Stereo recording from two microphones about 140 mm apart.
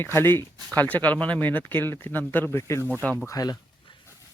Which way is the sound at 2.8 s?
15° right (ahead or behind).